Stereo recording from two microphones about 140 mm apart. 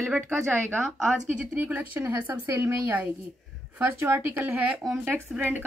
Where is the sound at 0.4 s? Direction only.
15° right (ahead or behind).